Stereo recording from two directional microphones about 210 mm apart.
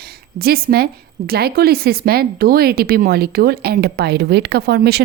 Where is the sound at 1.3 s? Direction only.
50° right (ahead or behind).